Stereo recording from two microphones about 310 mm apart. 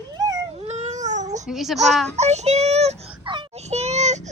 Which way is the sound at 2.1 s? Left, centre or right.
Right.